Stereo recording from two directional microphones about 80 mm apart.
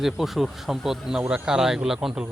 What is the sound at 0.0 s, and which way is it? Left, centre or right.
Speech, centre.